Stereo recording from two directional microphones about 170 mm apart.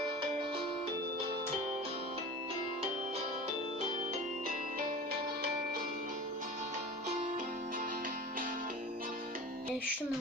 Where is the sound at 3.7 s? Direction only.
50° right (ahead or behind); by 5.5 s 65° right (ahead or behind).